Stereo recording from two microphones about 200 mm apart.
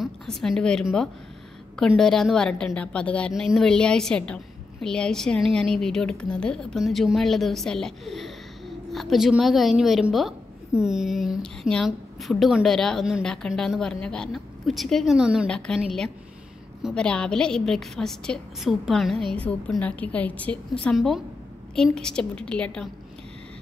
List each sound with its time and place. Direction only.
0.0 s a woman's voice: centre (ahead or behind)